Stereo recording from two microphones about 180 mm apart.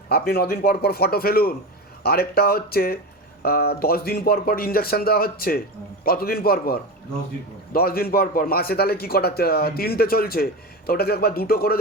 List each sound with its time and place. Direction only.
0.1 s a man's voice: 60° left (ahead or behind)